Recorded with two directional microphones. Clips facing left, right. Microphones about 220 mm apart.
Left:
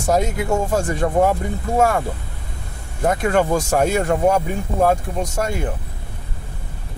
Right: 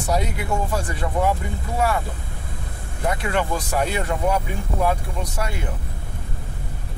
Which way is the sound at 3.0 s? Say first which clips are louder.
Left 6 dB; 45° left (ahead or behind).